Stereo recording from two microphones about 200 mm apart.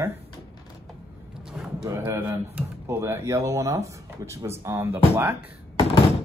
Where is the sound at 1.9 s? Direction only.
10° right (ahead or behind).